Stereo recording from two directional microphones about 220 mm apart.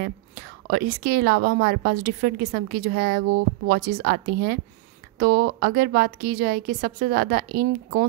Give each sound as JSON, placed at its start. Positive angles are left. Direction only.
{"t": 0.7, "sound": "a woman's voice", "side_deg": -45}